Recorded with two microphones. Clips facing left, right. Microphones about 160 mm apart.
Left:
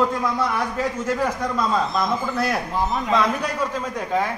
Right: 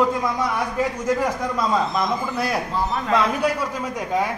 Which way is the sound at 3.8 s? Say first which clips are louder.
Even; 10° right (ahead or behind).